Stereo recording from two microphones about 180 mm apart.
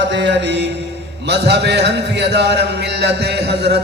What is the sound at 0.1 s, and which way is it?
Music, 75° right (ahead or behind).